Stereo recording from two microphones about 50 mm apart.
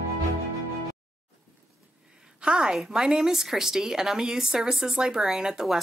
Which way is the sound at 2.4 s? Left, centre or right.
Centre.